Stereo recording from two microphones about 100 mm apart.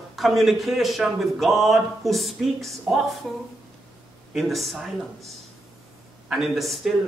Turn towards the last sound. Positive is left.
turn(degrees=0)  # may be behind; listen again after turning